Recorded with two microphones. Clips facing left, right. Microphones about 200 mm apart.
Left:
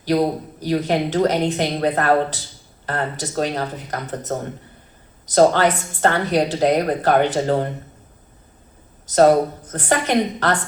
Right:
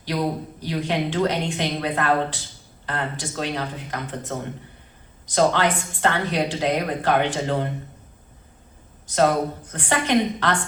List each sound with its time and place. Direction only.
0.1 s a woman's voice: 40° left (ahead or behind)
9.0 s a woman's voice: 40° left (ahead or behind)